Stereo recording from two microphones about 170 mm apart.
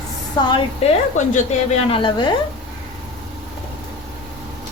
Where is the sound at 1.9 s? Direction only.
30° left (ahead or behind).